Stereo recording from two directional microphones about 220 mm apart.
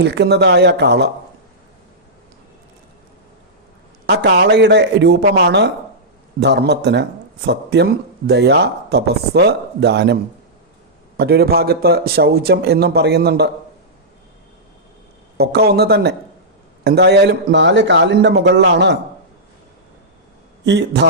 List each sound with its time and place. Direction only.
0.0 s speech: 50° right (ahead or behind)
4.0 s speech: 50° right (ahead or behind)
11.2 s speech: 45° right (ahead or behind)
15.4 s speech: 45° right (ahead or behind)
20.7 s speech: 50° right (ahead or behind)